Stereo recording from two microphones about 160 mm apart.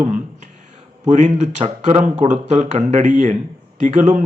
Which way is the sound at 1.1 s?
45° right (ahead or behind).